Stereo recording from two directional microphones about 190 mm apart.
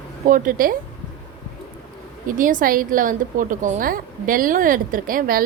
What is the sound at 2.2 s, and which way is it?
A woman's voice, 45° right (ahead or behind).